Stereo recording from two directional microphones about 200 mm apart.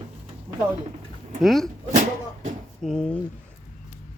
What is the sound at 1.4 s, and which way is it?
Speech, centre (ahead or behind).